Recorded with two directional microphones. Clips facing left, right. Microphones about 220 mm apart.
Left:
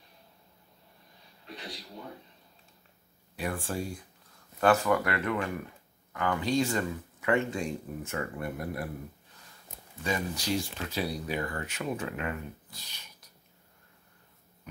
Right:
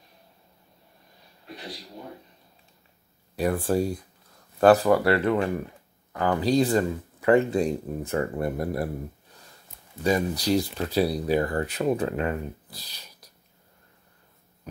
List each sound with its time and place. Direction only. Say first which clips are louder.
3.3 s speech: right 10 dB; 40° right (ahead or behind)
10.0 s speech: right 8 dB; 35° right (ahead or behind)